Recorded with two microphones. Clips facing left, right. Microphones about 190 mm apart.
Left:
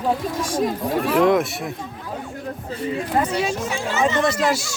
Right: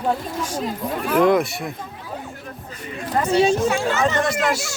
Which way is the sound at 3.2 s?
30° right (ahead or behind).